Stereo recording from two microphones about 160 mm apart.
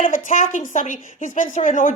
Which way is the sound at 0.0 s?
55° left (ahead or behind).